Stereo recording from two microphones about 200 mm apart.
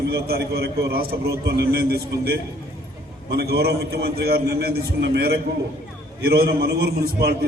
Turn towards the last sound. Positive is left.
turn(degrees=-50)  # may be behind; listen again after turning